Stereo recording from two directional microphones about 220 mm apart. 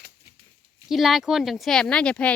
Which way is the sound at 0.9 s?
Centre (ahead or behind).